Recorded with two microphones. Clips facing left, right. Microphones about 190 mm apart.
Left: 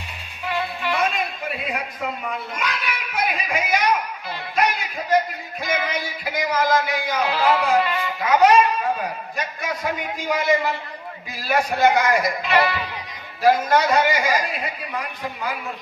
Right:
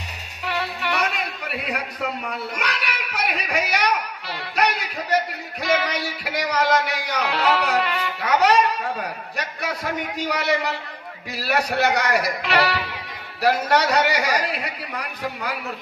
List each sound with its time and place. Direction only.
0.5 s music: 70° right (ahead or behind)
1.5 s a sound: 70° right (ahead or behind)
4.6 s music: 70° right (ahead or behind)
7.1 s speech: 70° right (ahead or behind)
8.2 s music: 70° right (ahead or behind)
9.0 s a sound: 70° right (ahead or behind)
10.1 s a man's voice: 75° right (ahead or behind)